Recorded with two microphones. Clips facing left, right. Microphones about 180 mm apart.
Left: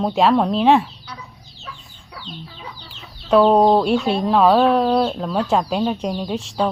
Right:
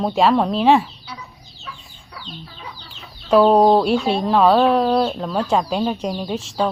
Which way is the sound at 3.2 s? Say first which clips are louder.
Right 1 dB; centre (ahead or behind).